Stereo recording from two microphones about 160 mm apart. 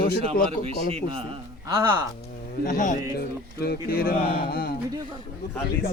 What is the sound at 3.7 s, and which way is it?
Speech, 70° left (ahead or behind).